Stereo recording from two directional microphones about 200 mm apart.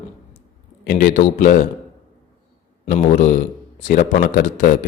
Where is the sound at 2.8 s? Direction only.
40° left (ahead or behind).